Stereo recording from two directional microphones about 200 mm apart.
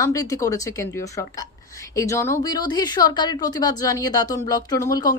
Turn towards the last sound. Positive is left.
turn(degrees=15)  # may be behind; listen again after turning